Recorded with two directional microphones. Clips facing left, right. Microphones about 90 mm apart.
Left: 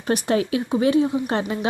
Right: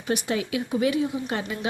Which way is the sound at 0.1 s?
40° left (ahead or behind).